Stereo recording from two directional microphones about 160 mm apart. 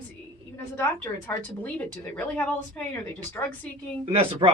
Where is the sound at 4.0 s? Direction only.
35° right (ahead or behind).